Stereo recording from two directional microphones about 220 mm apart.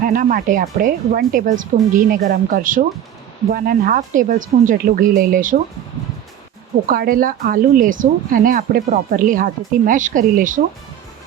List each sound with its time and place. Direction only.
0.0 s speech: 40° right (ahead or behind)
6.8 s speech: 40° right (ahead or behind)